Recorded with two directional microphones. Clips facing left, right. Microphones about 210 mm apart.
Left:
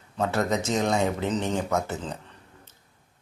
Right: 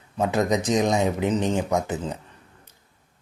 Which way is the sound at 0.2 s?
15° right (ahead or behind).